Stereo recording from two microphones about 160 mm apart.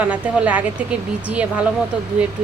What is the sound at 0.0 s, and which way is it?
Speech, 10° right (ahead or behind).